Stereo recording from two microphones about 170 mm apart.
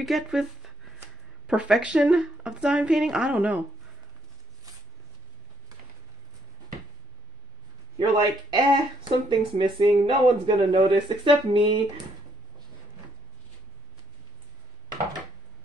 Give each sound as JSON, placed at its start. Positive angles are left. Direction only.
{"t": 0.0, "sound": "a sound", "side_deg": 0}
{"t": 1.5, "sound": "a woman's voice", "side_deg": -5}
{"t": 8.0, "sound": "speech", "side_deg": -25}